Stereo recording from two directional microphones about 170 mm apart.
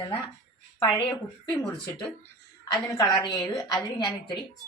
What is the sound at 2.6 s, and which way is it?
A woman's voice, 20° left (ahead or behind).